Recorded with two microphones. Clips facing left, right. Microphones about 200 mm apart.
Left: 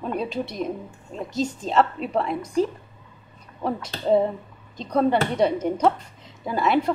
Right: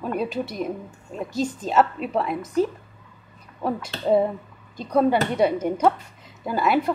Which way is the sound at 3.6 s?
5° right (ahead or behind).